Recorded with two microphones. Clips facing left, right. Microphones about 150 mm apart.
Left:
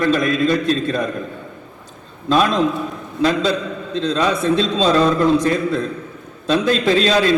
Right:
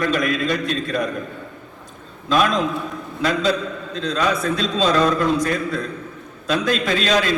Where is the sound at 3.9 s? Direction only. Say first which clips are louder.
Left 3 dB; 25° left (ahead or behind).